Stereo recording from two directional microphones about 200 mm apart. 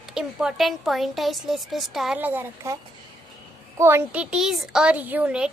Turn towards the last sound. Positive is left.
turn(degrees=-5)  # may be behind; listen again after turning